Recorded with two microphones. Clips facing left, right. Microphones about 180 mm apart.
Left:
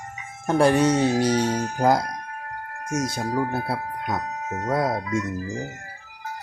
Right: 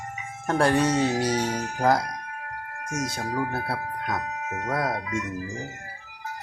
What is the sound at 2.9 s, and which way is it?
Speech, 35° left (ahead or behind).